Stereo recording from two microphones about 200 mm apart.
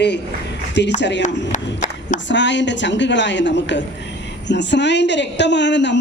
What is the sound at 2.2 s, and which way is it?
A woman's voice, 65° left (ahead or behind).